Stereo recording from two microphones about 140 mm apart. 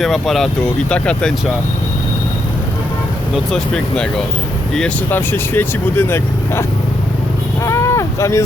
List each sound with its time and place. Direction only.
0.0 s speech: centre (ahead or behind)
3.3 s speech: 5° left (ahead or behind)
5.1 s speech: 15° left (ahead or behind)
7.6 s a sound: 20° left (ahead or behind)